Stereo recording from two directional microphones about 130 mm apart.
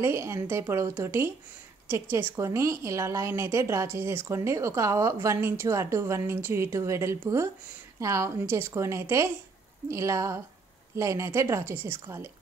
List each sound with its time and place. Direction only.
0.0 s a woman's voice: 20° right (ahead or behind)